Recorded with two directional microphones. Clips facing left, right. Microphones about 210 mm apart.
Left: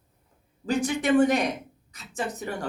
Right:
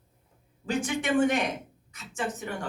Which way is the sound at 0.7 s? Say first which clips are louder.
Left 4 dB; 40° left (ahead or behind).